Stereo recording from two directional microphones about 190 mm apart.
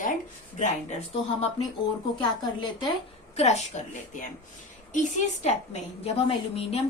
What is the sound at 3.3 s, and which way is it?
Speech, 35° left (ahead or behind).